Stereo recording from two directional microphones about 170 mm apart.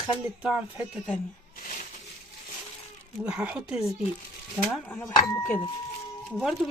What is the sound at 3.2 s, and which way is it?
Speech, 5° right (ahead or behind).